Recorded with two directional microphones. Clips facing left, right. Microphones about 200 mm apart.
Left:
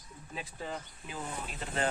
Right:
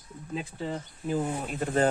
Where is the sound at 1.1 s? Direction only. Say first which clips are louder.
Right 11 dB; 50° right (ahead or behind).